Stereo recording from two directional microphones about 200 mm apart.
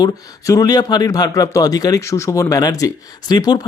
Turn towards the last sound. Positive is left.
turn(degrees=20)  # may be behind; listen again after turning